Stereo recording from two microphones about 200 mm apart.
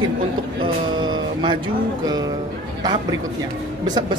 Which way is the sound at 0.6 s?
25° right (ahead or behind).